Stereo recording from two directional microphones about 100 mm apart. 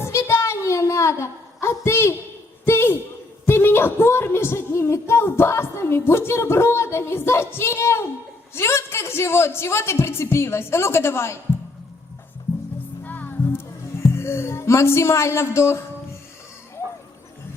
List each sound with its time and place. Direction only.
0.0 s a sound: 25° left (ahead or behind)
8.5 s a woman's voice: 25° left (ahead or behind)
13.1 s music: 20° left (ahead or behind)
14.0 s speech: 25° left (ahead or behind)